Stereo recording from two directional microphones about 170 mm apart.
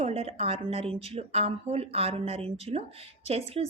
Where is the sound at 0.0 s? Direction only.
35° right (ahead or behind).